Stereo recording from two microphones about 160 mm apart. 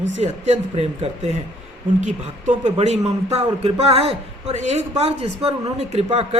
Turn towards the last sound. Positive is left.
turn(degrees=-40)  # may be behind; listen again after turning